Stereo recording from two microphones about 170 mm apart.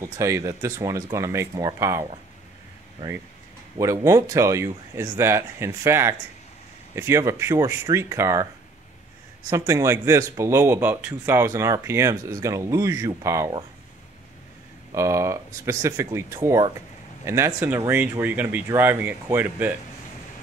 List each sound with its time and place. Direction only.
0.0 s speech: 15° right (ahead or behind)
3.7 s speech: 20° right (ahead or behind)
9.5 s speech: 15° right (ahead or behind)
15.0 s speech: 15° right (ahead or behind)